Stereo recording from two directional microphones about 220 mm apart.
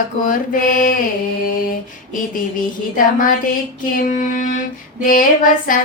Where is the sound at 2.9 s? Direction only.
40° left (ahead or behind).